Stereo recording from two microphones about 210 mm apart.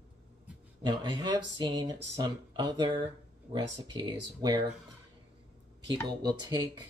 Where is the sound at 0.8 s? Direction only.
20° right (ahead or behind).